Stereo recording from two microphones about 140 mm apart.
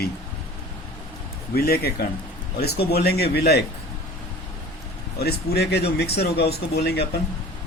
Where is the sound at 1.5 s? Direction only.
90° left.